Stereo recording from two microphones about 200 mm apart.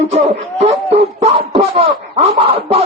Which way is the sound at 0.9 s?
30° right (ahead or behind).